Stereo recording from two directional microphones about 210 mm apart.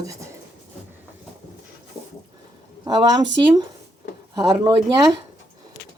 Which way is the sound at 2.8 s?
20° right (ahead or behind).